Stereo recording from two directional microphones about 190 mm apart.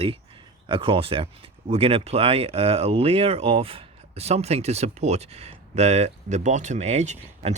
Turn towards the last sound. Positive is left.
turn(degrees=-35)  # may be behind; listen again after turning